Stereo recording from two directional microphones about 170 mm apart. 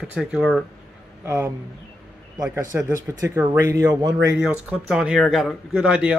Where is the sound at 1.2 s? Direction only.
15° right (ahead or behind).